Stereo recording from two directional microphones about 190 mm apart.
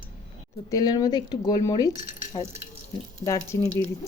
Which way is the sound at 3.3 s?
15° left (ahead or behind).